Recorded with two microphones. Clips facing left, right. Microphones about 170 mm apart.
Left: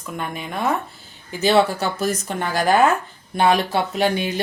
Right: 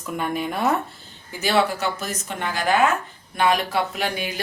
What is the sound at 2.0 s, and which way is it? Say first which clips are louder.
Speech: left 6 dB; 35° left (ahead or behind).